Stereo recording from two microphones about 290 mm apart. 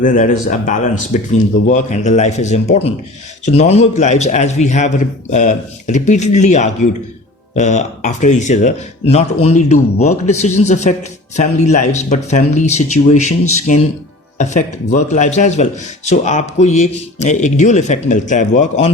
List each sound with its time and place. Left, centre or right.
0.0 s speech: left
14.3 s speech: left